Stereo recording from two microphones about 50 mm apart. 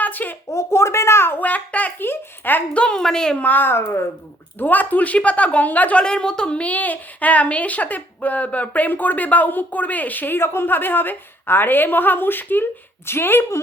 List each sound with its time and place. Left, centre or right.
0.0 s a sound: left
0.5 s speech: left
1.4 s speech: left
2.0 s a child's voice: left
2.7 s a woman's voice: left
3.0 s speech: centre
3.3 s speech: left
6.0 s a child's voice: centre; by 13.4 s left